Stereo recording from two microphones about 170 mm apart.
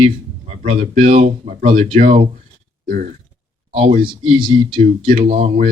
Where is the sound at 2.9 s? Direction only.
50° right (ahead or behind).